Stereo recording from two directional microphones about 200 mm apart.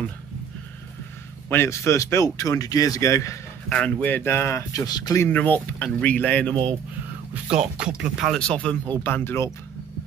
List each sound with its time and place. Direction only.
1.5 s speech: 15° left (ahead or behind)
6.5 s speech: 25° right (ahead or behind)
7.4 s speech: 5° right (ahead or behind); by 9.5 s 10° left (ahead or behind)